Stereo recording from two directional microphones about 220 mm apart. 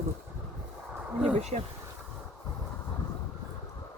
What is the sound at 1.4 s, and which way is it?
Speech, 30° right (ahead or behind).